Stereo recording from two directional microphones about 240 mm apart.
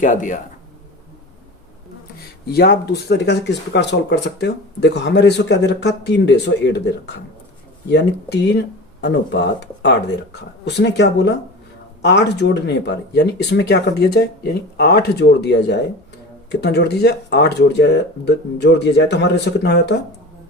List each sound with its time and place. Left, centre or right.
0.0 s speech: left
2.5 s speech: left